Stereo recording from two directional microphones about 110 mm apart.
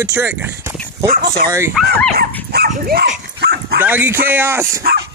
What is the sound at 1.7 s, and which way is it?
Speech, 5° left (ahead or behind).